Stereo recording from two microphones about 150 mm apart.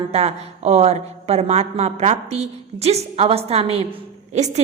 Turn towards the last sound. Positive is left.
turn(degrees=-50)  # may be behind; listen again after turning